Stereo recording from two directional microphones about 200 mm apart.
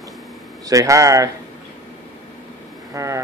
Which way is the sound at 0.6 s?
15° right (ahead or behind).